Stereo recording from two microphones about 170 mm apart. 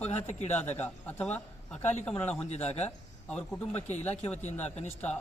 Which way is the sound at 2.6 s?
40° left (ahead or behind).